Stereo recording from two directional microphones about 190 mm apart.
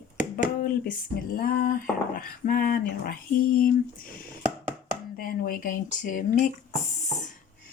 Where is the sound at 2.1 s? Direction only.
50° left (ahead or behind).